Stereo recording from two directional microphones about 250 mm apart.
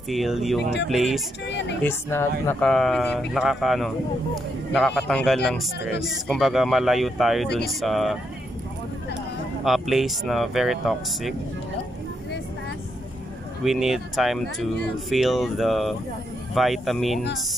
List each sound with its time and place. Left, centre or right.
0.1 s speech: centre
1.5 s a woman's voice: left
1.8 s speech: centre
9.7 s speech: centre
13.7 s speech: centre